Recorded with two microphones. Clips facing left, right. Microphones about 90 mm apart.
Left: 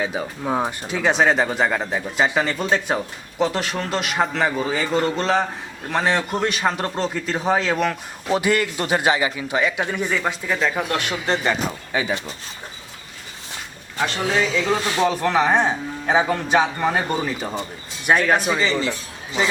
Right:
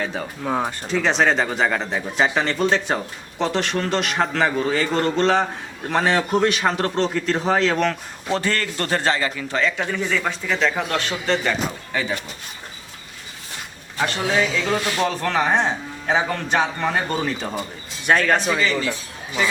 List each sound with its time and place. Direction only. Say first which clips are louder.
0.0 s a man's voice: left 1 dB; 10° left (ahead or behind)
14.0 s a man's voice: even; centre (ahead or behind)
18.5 s speech: even; 20° left (ahead or behind)